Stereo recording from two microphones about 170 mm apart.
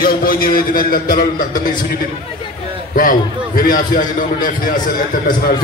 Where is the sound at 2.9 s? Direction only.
55° left (ahead or behind).